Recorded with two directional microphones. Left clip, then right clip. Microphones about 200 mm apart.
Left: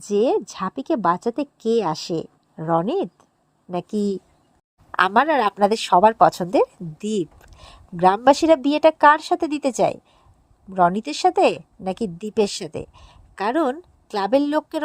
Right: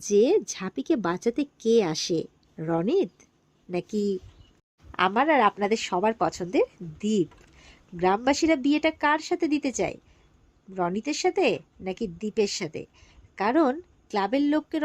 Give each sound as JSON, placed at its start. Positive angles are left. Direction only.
{"t": 0.0, "sound": "a woman's voice", "side_deg": 5}
{"t": 3.9, "sound": "speech", "side_deg": 25}